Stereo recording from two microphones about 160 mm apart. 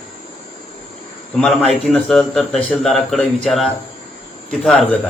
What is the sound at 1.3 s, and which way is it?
Speech, 5° left (ahead or behind).